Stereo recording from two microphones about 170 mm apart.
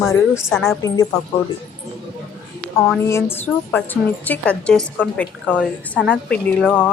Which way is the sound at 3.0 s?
15° left (ahead or behind).